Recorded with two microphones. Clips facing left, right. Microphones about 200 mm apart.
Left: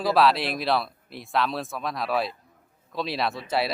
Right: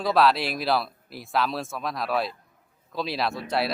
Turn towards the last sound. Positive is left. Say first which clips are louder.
# even
turn(degrees=0)  # may be behind; listen again after turning